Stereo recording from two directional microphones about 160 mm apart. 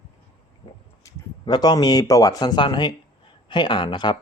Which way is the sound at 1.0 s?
25° left (ahead or behind).